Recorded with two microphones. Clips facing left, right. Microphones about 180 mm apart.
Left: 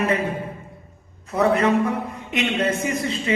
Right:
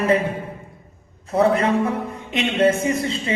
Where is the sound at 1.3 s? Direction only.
30° right (ahead or behind).